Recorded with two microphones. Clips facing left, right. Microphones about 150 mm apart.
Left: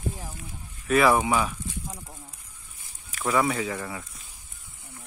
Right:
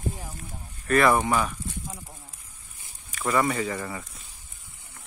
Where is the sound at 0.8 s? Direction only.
5° left (ahead or behind).